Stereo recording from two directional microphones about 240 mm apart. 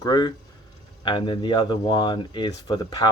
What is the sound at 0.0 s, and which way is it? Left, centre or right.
Speech, centre.